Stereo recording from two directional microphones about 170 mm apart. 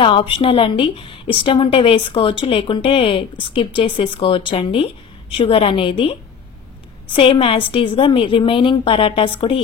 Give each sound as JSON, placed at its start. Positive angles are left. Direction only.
{"t": 0.0, "sound": "a woman's voice", "side_deg": 30}
{"t": 7.2, "sound": "a woman's voice", "side_deg": 30}